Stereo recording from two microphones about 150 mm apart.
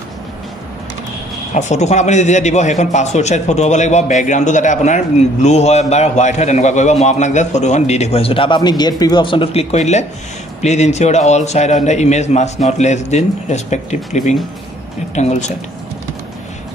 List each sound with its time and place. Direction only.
1.5 s a man's voice: 50° left (ahead or behind)